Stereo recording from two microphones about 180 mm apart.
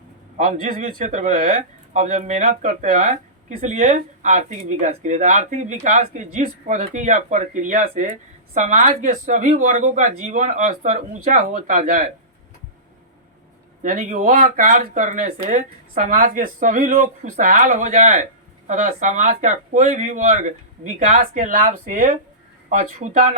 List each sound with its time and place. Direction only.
0.3 s speech: 45° right (ahead or behind)
13.8 s speech: 45° right (ahead or behind)